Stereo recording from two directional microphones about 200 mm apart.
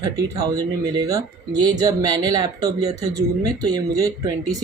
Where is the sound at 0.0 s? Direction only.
20° right (ahead or behind).